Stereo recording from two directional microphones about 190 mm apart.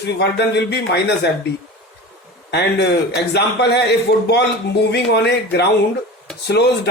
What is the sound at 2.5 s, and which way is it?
Speech, 60° left (ahead or behind).